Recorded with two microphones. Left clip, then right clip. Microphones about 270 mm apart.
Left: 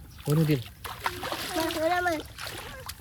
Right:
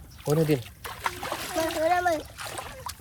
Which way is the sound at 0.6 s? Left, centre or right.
Centre.